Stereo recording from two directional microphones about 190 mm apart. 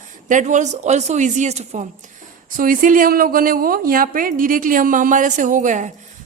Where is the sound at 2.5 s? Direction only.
45° right (ahead or behind).